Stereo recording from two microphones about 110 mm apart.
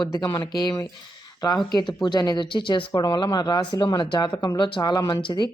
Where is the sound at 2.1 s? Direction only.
40° left (ahead or behind).